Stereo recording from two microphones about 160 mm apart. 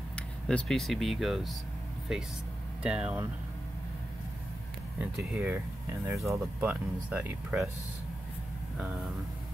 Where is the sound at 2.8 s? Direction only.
5° right (ahead or behind).